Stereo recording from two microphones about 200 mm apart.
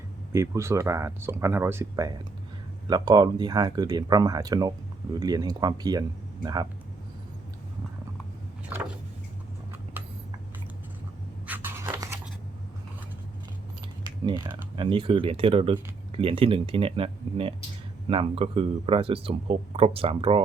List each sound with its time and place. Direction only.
0.3 s speech: 15° right (ahead or behind)
11.4 s a sound: 10° right (ahead or behind)
14.0 s speech: 20° right (ahead or behind)